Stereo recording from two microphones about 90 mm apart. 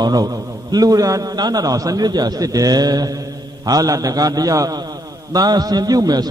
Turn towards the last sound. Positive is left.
turn(degrees=-45)  # may be behind; listen again after turning